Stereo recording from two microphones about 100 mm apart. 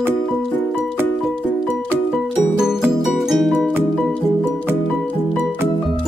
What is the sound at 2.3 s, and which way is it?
Music, 5° right (ahead or behind).